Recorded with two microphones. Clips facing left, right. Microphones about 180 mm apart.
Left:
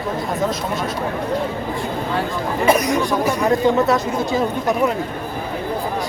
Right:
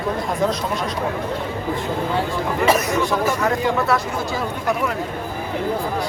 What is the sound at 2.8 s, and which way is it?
Speech, 15° left (ahead or behind).